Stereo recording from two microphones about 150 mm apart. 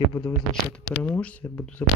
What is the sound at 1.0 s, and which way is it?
Speech, 10° left (ahead or behind).